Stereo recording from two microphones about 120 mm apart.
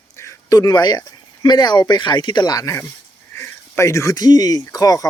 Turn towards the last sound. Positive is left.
turn(degrees=30)  # may be behind; listen again after turning